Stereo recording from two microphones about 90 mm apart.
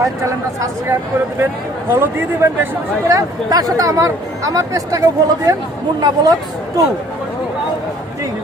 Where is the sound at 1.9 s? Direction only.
30° right (ahead or behind).